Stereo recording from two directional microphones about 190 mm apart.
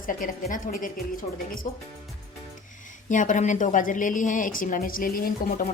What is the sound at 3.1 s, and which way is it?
A woman's voice, 40° left (ahead or behind).